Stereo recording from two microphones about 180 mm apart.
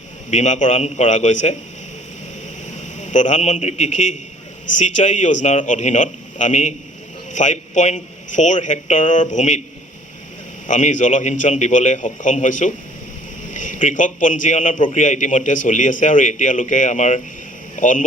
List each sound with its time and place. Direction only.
0.3 s a man's voice: 40° left (ahead or behind)
2.7 s a man's voice: 40° left (ahead or behind)
10.7 s a man's voice: 45° left (ahead or behind)